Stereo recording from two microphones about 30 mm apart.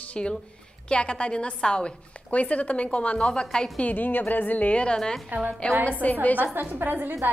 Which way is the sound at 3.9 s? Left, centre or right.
Left.